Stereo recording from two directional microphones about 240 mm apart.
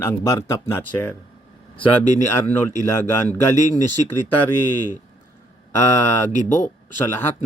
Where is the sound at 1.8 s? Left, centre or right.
Left.